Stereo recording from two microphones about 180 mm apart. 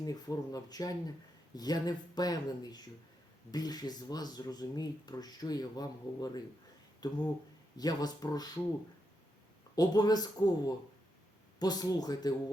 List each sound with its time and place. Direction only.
0.0 s speech: 20° left (ahead or behind)
9.7 s speech: 20° left (ahead or behind)
11.6 s speech: 20° left (ahead or behind)